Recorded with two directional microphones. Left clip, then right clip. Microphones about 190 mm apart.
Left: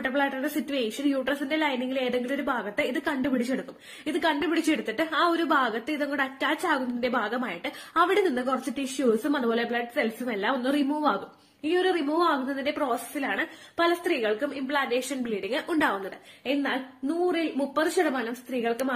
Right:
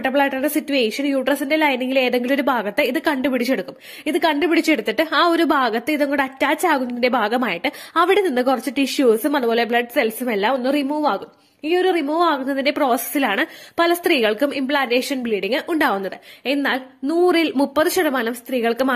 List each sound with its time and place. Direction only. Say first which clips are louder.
0.0 s a woman's voice: right 8 dB; 45° right (ahead or behind)
16.4 s speech: right 7 dB; 60° right (ahead or behind)